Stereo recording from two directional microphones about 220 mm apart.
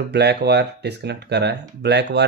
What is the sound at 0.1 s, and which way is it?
Speech, 50° right (ahead or behind).